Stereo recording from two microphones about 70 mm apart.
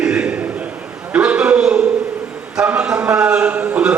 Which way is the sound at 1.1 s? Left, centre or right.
Centre.